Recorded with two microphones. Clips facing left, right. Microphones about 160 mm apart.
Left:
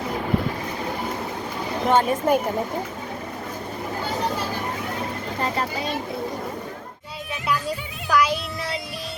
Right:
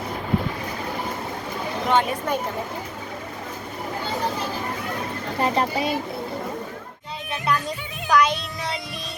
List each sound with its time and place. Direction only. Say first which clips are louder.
1.9 s speech: left 3 dB; 40° left (ahead or behind)
5.4 s speech: right 5 dB; 15° right (ahead or behind)
8.1 s child singing: right 1 dB; 5° left (ahead or behind)